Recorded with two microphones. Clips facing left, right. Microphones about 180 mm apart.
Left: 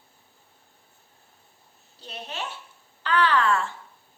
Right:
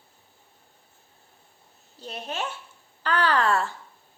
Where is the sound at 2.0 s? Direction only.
45° right (ahead or behind).